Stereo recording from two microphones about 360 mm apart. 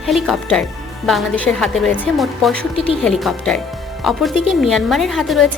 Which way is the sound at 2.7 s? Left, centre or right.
Centre.